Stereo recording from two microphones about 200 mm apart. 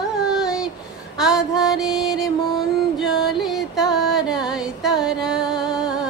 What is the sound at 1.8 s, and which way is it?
Music, 20° left (ahead or behind).